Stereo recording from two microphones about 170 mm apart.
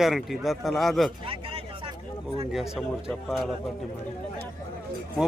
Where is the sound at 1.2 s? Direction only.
35° right (ahead or behind).